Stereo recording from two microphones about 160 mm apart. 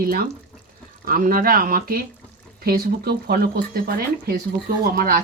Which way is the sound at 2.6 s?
75° right (ahead or behind).